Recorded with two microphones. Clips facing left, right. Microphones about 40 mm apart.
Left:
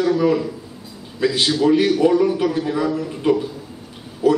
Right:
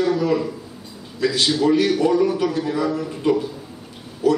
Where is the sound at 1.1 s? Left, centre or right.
Centre.